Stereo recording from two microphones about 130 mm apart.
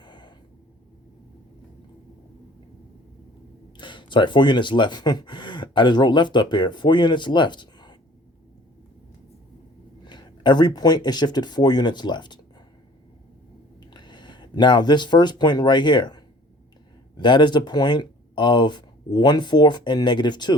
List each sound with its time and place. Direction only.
0.0 s a sound: 35° left (ahead or behind)
3.8 s speech: 35° left (ahead or behind)
10.0 s speech: 35° left (ahead or behind)
13.9 s speech: 35° left (ahead or behind)